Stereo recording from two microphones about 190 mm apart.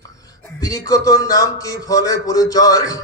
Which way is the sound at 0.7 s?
20° left (ahead or behind).